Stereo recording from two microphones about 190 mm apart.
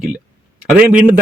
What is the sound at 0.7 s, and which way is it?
Speech, 10° right (ahead or behind).